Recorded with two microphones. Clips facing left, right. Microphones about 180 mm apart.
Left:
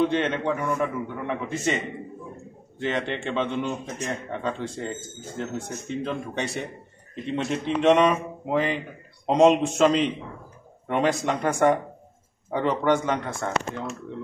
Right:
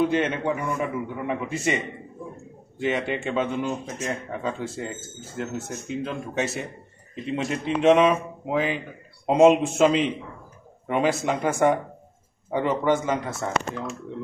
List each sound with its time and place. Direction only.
0.0 s a man's voice: 10° right (ahead or behind)
2.8 s a man's voice: 10° right (ahead or behind)